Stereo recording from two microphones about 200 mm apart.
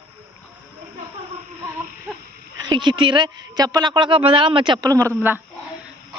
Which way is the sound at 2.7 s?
25° right (ahead or behind).